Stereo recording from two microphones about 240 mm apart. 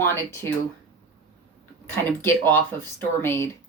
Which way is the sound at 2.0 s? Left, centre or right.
Centre.